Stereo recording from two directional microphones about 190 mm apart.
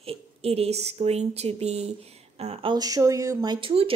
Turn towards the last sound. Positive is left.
turn(degrees=-30)  # may be behind; listen again after turning